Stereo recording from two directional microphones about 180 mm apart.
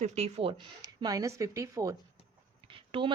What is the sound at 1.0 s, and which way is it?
A woman's voice, 20° right (ahead or behind).